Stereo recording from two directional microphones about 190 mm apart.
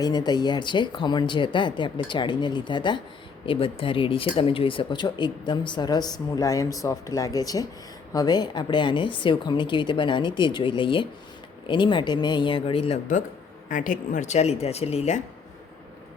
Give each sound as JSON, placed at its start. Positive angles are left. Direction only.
{"t": 0.0, "sound": "speech", "side_deg": 20}